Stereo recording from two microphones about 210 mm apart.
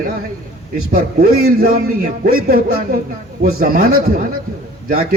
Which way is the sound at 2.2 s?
45° right (ahead or behind).